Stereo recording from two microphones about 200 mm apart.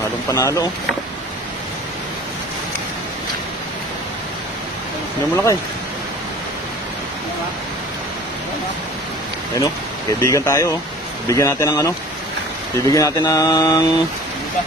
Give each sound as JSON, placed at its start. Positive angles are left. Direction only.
{"t": 0.3, "sound": "mantra", "side_deg": 15}
{"t": 5.3, "sound": "mantra", "side_deg": 15}
{"t": 10.2, "sound": "mantra", "side_deg": 15}